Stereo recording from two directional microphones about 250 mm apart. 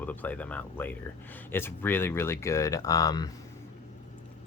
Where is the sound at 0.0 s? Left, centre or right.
Centre.